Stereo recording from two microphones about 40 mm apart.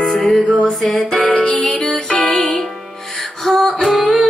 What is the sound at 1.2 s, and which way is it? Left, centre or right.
Music, left.